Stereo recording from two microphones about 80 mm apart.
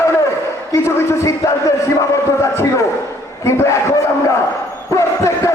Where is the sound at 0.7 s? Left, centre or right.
Left.